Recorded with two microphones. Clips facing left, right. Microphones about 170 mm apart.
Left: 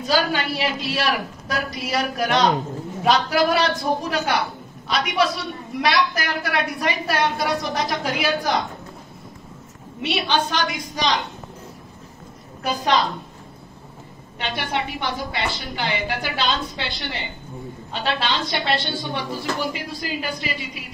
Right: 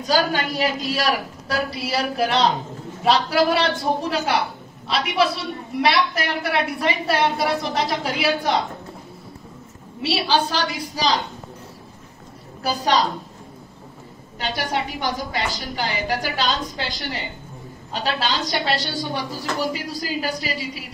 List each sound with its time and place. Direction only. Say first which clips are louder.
0.0 s a woman's voice: right 1 dB; 40° right (ahead or behind)
10.3 s a woman's voice: right 1 dB; 35° right (ahead or behind)
12.6 s a woman's voice: even; 35° right (ahead or behind)
14.4 s a woman's voice: right 1 dB; 40° right (ahead or behind)